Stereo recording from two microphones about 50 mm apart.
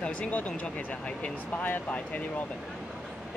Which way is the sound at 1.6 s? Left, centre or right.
Left.